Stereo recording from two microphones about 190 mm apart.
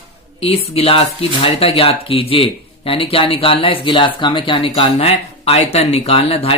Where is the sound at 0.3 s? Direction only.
30° left (ahead or behind).